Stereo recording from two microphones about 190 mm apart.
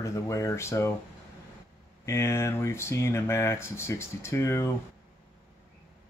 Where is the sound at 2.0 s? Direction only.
15° left (ahead or behind).